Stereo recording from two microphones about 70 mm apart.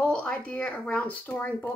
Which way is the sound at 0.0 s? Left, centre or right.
Centre.